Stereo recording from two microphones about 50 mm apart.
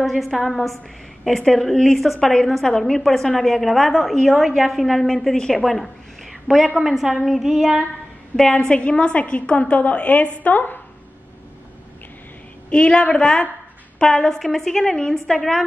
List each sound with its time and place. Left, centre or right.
0.0 s a woman's voice: centre
8.4 s a woman's voice: centre; by 10.8 s left
12.6 s a woman's voice: centre